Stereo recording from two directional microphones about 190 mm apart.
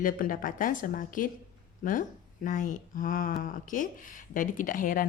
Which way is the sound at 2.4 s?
40° left (ahead or behind).